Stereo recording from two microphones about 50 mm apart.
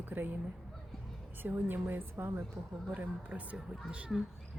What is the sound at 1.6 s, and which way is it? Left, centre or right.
Speech, right.